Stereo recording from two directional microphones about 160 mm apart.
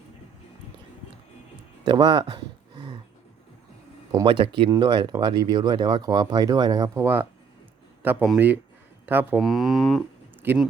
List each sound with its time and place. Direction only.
1.8 s a sound: 25° right (ahead or behind)
4.1 s speech: 30° right (ahead or behind); by 9.4 s 10° right (ahead or behind)
9.4 s speech: centre (ahead or behind)
10.4 s speech: 10° right (ahead or behind)